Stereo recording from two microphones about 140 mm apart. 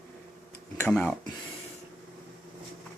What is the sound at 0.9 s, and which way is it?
Speech, 5° left (ahead or behind).